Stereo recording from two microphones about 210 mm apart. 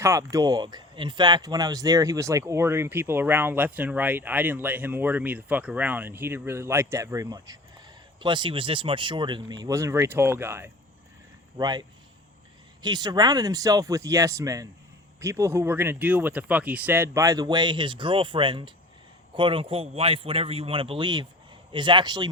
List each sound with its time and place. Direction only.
0.0 s speech: 15° right (ahead or behind)